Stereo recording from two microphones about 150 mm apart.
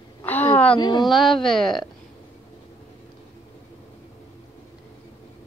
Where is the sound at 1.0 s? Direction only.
Centre (ahead or behind).